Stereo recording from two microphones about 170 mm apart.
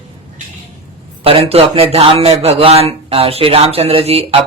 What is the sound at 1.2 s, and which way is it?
A man's voice, 35° right (ahead or behind).